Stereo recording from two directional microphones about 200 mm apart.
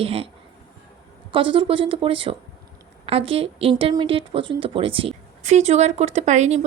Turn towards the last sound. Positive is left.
turn(degrees=-35)  # may be behind; listen again after turning